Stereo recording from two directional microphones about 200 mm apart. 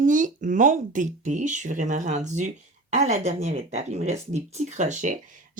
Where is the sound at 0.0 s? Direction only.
40° right (ahead or behind).